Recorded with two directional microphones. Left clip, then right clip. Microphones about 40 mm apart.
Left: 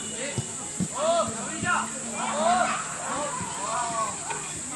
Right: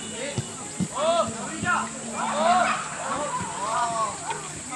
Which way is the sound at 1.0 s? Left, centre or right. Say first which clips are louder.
Right 1 dB; centre.